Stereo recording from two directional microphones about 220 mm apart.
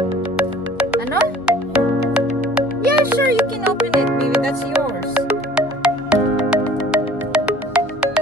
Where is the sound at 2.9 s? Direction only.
5° right (ahead or behind).